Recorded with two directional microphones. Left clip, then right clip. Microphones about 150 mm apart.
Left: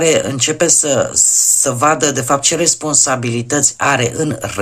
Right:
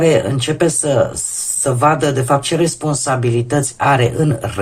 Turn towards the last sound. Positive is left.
turn(degrees=35)  # may be behind; listen again after turning